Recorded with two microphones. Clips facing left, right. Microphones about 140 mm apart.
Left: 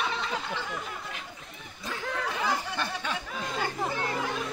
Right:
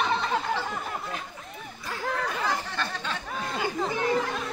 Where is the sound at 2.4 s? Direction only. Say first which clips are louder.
Even; 15° left (ahead or behind).